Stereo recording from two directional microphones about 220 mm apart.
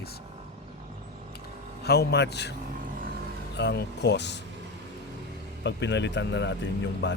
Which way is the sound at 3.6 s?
50° left (ahead or behind).